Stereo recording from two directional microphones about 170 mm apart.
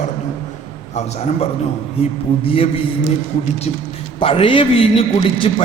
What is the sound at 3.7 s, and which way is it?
A man's voice, 40° left (ahead or behind).